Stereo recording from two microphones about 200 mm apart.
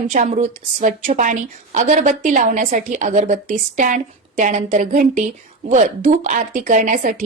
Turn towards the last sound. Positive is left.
turn(degrees=-40)  # may be behind; listen again after turning